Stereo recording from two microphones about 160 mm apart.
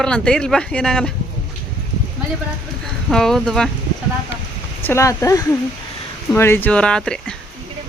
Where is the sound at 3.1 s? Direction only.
Centre (ahead or behind).